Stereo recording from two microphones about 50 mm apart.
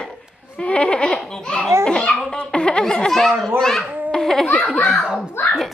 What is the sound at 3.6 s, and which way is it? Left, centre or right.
Speech, centre.